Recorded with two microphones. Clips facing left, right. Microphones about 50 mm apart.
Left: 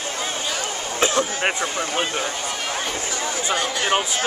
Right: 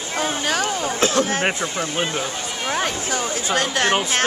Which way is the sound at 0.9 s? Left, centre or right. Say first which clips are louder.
Even; centre.